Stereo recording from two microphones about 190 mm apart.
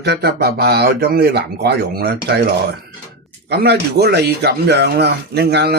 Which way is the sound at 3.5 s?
60° right (ahead or behind).